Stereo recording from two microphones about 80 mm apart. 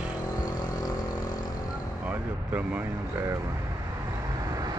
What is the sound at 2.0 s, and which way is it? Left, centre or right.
Vehicle, centre.